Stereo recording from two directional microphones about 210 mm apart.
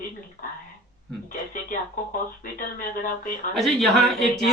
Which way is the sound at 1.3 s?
40° left (ahead or behind).